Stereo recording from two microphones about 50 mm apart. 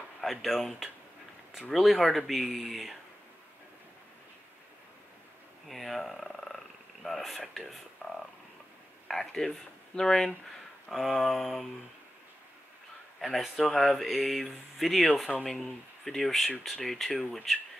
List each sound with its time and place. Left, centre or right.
0.2 s speech: centre
1.7 s speech: centre
5.7 s speech: centre
8.0 s a sound: left
9.0 s speech: centre
10.9 s speech: centre
13.4 s speech: centre